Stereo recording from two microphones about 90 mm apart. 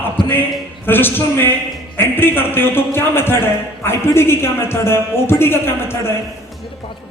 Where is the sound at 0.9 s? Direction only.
25° left (ahead or behind).